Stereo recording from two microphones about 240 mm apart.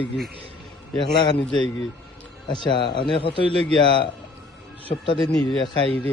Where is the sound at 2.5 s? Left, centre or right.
Centre.